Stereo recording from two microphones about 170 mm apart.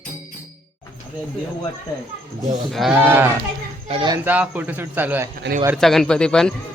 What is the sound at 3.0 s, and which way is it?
Speech, 10° right (ahead or behind).